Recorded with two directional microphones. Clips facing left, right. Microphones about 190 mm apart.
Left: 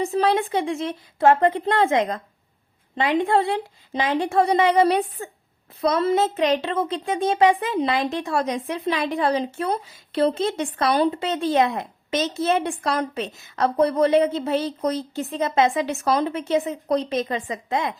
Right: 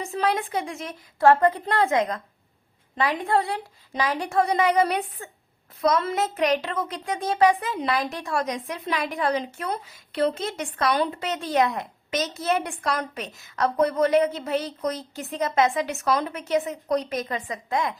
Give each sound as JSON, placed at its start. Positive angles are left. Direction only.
{"t": 0.0, "sound": "a child's voice", "side_deg": 30}